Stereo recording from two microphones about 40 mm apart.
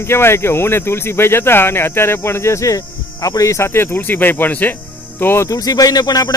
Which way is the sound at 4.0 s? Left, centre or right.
Left.